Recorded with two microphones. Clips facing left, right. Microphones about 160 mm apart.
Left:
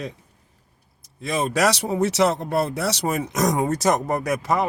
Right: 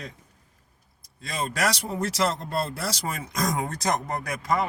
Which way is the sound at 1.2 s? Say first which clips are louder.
Left 7 dB; 70° left (ahead or behind).